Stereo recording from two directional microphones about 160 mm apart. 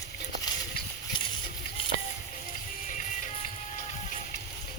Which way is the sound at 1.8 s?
35° left (ahead or behind).